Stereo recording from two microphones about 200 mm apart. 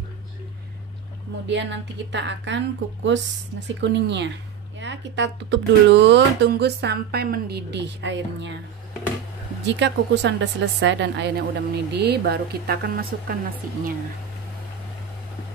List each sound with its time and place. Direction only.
1.5 s speech: 60° right (ahead or behind)
9.7 s speech: 60° right (ahead or behind)